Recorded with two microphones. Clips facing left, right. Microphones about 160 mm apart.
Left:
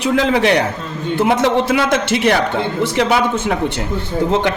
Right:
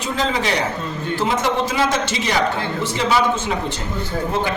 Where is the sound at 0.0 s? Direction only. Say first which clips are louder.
Left 7 dB; 60° left (ahead or behind).